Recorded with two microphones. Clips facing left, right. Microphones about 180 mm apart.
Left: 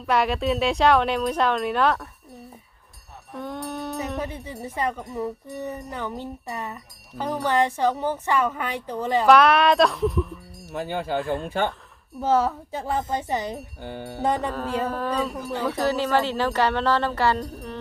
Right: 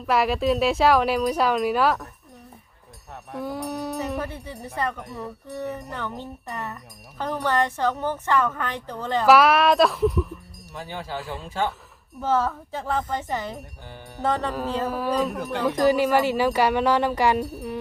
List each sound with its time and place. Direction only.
0.0 s speech: centre (ahead or behind)
3.3 s a sound: 5° right (ahead or behind)
4.2 s speech: 15° left (ahead or behind)
9.2 s speech: 5° right (ahead or behind)
10.8 s speech: 55° left (ahead or behind)
12.2 s speech: 15° left (ahead or behind)
13.8 s speech: 60° left (ahead or behind)
14.2 s speech: 15° left (ahead or behind)
14.8 s speech: 10° right (ahead or behind)